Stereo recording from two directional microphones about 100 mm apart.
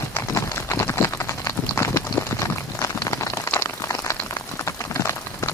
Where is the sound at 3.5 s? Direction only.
20° left (ahead or behind).